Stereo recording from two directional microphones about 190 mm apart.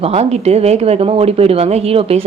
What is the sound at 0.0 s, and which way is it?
Speech, 35° right (ahead or behind).